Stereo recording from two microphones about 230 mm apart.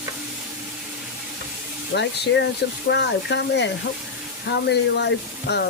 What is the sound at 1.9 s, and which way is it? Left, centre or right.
Speech, left.